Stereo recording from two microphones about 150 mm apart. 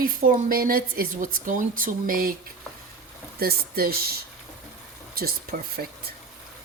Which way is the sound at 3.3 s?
85° right.